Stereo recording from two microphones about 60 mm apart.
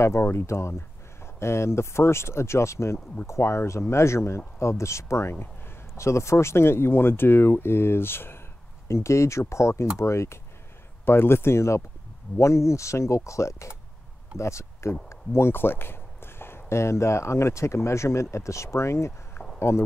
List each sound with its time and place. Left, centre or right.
0.0 s speech: left
5.9 s speech: left
8.8 s speech: left
11.1 s speech: left